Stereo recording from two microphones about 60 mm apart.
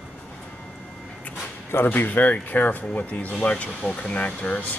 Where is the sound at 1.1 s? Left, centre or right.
Left.